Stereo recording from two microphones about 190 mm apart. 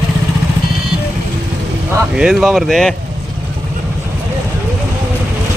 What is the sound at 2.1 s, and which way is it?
Speech, centre (ahead or behind).